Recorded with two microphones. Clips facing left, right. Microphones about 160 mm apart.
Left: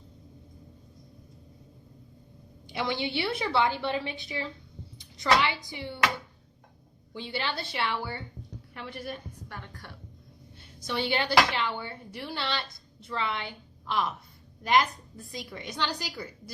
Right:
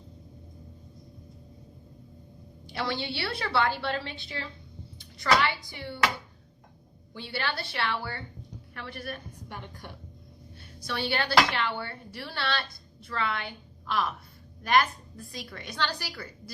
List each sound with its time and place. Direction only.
2.7 s a woman's voice: 15° left (ahead or behind)
4.9 s a sound: 20° left (ahead or behind)
5.6 s a woman's voice: 15° left (ahead or behind)
7.1 s a woman's voice: 20° left (ahead or behind)
9.5 s a woman's voice: 15° right (ahead or behind)
10.8 s a woman's voice: 20° left (ahead or behind)